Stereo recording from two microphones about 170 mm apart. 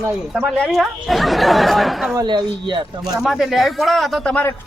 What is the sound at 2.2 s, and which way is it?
Speech, 25° right (ahead or behind).